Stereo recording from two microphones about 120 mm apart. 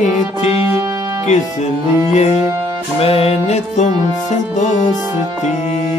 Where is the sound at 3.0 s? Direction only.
55° left (ahead or behind).